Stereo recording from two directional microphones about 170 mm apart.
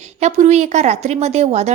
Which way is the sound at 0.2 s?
45° right (ahead or behind).